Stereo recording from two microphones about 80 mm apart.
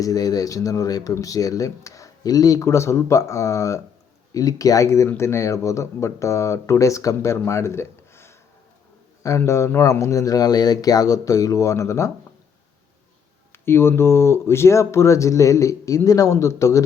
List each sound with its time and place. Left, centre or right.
0.0 s speech: left
9.2 s speech: left
13.5 s speech: left